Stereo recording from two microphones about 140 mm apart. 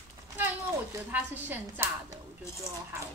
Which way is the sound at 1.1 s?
15° right (ahead or behind).